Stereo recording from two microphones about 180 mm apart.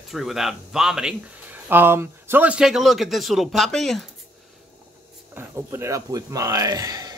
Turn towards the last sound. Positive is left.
turn(degrees=-20)  # may be behind; listen again after turning